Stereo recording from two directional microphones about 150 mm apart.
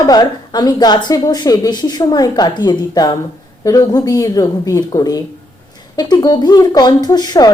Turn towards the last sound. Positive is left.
turn(degrees=25)  # may be behind; listen again after turning